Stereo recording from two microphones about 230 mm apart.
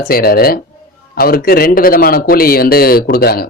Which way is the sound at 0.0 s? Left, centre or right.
Left.